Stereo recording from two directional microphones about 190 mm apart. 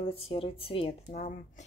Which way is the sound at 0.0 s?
30° left (ahead or behind).